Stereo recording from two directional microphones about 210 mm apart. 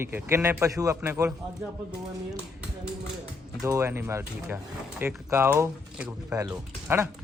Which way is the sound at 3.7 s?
15° right (ahead or behind).